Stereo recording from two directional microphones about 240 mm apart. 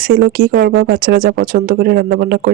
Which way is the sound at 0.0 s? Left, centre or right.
Right.